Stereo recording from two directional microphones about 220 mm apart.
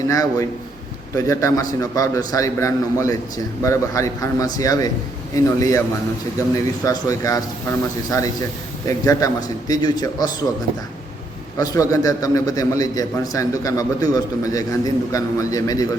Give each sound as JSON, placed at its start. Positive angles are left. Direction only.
{"t": 0.1, "sound": "a man's voice", "side_deg": 15}
{"t": 6.8, "sound": "a man's voice", "side_deg": 15}
{"t": 11.5, "sound": "a man's voice", "side_deg": 15}